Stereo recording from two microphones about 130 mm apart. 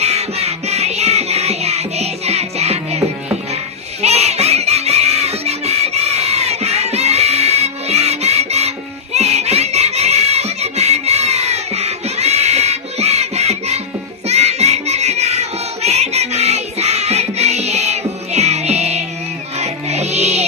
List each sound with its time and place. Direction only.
0.0 s music: 55° right (ahead or behind)
4.0 s fowl: 55° right (ahead or behind)
9.1 s music: 55° right (ahead or behind)